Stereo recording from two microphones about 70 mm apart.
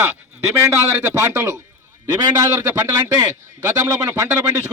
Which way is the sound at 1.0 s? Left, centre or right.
Right.